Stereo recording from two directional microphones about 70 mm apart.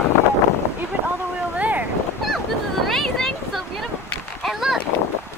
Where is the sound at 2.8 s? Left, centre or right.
Centre.